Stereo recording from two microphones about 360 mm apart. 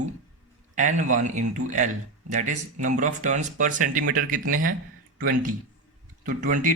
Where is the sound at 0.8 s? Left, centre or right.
Right.